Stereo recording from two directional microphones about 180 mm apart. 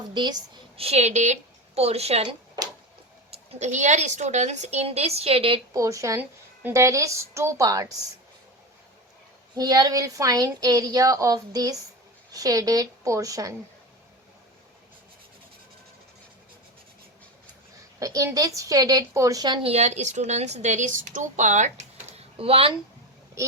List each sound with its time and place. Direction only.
0.1 s a woman's voice: 25° right (ahead or behind)
3.3 s a woman's voice: 35° right (ahead or behind)
5.7 s a woman's voice: 20° right (ahead or behind)
9.6 s a woman's voice: 20° right (ahead or behind)
18.0 s a woman's voice: 20° right (ahead or behind)
19.6 s a woman's voice: 35° right (ahead or behind)